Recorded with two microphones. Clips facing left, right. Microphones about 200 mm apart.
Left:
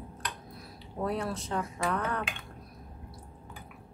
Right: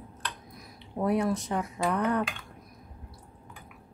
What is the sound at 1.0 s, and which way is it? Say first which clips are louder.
Speech: right 6 dB; 15° right (ahead or behind).